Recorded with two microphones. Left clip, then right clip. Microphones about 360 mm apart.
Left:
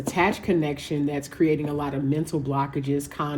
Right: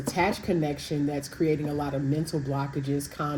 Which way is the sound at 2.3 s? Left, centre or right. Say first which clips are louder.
Left 3 dB; left.